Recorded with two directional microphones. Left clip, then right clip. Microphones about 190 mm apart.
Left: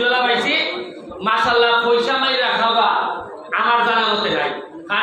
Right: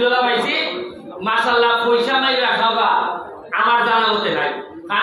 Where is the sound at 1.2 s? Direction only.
20° left (ahead or behind).